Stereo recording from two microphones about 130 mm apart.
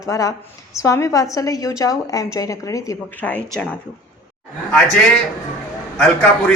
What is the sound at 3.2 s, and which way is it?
Speech, 5° left (ahead or behind).